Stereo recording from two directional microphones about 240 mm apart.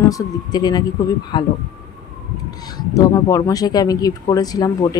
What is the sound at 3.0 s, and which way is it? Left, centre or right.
Speech, centre.